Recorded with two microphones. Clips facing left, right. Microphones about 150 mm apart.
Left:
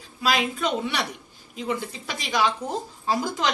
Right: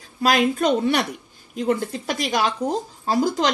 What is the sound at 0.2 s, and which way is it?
A woman's voice, 50° right (ahead or behind).